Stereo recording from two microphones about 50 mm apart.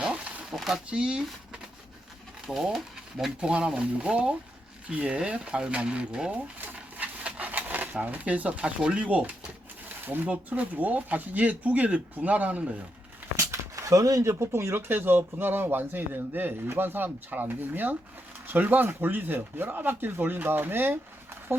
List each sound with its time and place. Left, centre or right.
0.5 s a sound: centre
0.9 s speech: centre
2.7 s speech: centre
3.4 s speech: right
6.3 s a sound: right
8.0 s speech: right
10.3 s speech: right
13.3 s speech: right